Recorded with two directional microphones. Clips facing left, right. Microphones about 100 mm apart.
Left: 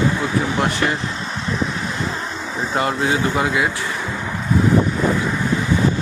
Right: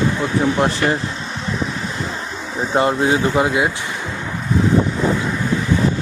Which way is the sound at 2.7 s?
25° right (ahead or behind).